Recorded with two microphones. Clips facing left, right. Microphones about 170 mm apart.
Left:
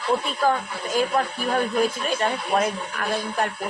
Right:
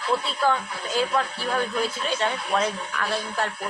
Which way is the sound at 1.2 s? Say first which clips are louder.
Left 2 dB; 40° left (ahead or behind).